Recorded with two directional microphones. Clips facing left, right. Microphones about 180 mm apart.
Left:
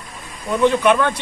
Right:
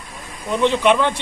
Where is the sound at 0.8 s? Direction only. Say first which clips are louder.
Even; 20° right (ahead or behind).